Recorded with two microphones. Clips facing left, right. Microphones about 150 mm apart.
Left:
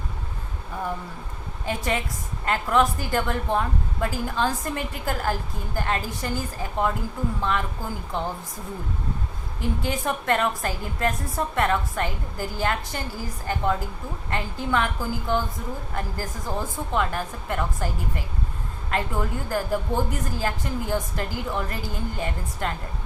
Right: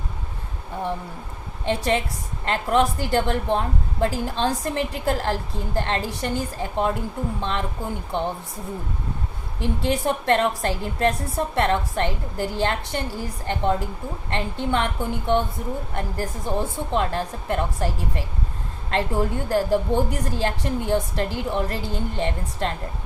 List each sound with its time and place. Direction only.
1.6 s a woman's voice: 30° right (ahead or behind)
9.8 s a woman's voice: 30° right (ahead or behind)